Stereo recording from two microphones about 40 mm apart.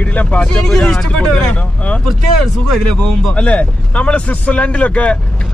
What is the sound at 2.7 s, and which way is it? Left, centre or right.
Speech, left.